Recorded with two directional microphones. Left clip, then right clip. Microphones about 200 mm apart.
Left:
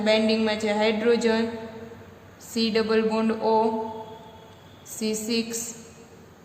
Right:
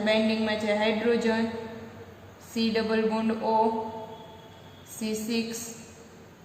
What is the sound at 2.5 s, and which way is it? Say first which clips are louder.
A woman's voice: left 4 dB; 35° left (ahead or behind).